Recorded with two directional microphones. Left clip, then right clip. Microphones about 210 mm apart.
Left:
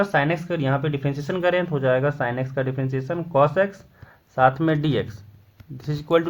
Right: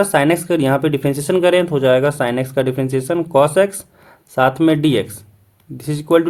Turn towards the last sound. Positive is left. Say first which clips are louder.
# right 6 dB
turn(degrees=-25)  # may be behind; listen again after turning